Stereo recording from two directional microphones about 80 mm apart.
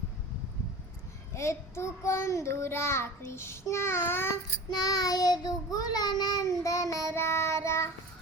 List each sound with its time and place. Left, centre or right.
1.3 s child singing: left
4.7 s child singing: left